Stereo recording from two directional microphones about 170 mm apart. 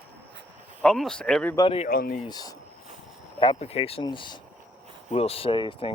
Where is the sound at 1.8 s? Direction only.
60° left (ahead or behind).